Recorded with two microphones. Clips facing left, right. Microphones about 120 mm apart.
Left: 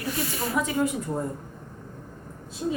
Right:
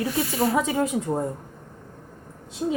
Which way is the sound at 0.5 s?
90° right.